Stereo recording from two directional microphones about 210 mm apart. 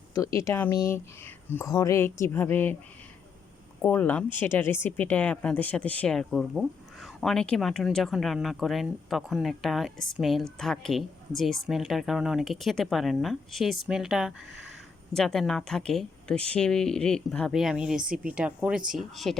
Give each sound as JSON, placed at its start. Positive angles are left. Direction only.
{"t": 0.1, "sound": "speech", "side_deg": 15}
{"t": 3.8, "sound": "speech", "side_deg": 10}